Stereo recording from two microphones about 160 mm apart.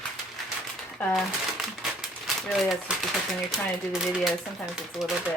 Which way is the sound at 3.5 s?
5° right (ahead or behind).